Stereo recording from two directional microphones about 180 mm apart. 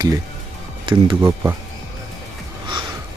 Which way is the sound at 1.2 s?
15° right (ahead or behind).